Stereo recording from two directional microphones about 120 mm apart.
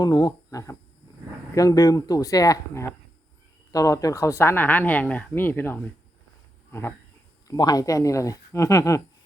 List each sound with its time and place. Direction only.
0.0 s speech: 35° left (ahead or behind)
7.4 s speech: 35° left (ahead or behind)